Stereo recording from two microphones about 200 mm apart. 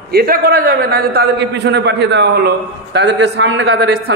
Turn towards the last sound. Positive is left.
turn(degrees=-60)  # may be behind; listen again after turning